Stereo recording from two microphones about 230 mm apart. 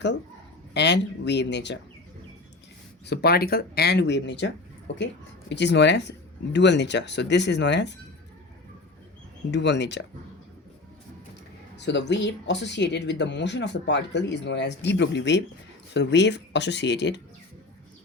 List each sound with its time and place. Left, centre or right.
0.7 s speech: left
3.1 s speech: left
9.5 s speech: left
11.8 s speech: left